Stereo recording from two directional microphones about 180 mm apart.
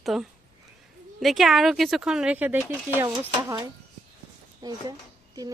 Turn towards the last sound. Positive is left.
turn(degrees=-20)  # may be behind; listen again after turning